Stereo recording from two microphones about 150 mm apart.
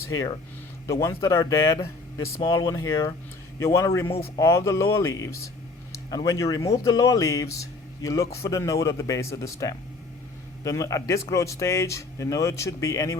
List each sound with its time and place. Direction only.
0.1 s speech: 20° left (ahead or behind)